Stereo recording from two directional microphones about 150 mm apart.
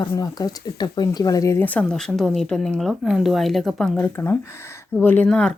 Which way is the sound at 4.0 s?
15° left (ahead or behind).